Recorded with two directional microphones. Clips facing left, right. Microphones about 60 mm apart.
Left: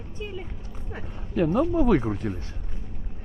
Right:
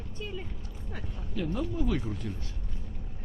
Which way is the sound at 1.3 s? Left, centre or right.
Left.